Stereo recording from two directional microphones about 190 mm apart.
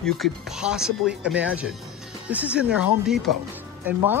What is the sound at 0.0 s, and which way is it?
Speech, centre (ahead or behind).